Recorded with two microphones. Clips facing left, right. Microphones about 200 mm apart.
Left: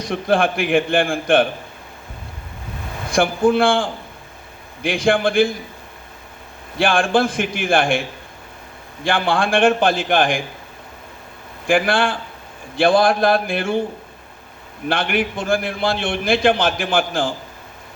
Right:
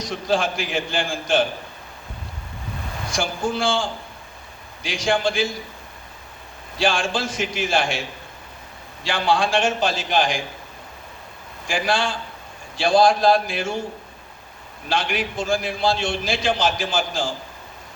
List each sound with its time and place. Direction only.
0.0 s a man's voice: 60° left (ahead or behind)
3.1 s a man's voice: 60° left (ahead or behind)
6.7 s a man's voice: 55° left (ahead or behind)
9.0 s a man's voice: 55° left (ahead or behind)
11.6 s a man's voice: 55° left (ahead or behind)
14.8 s a man's voice: 60° left (ahead or behind)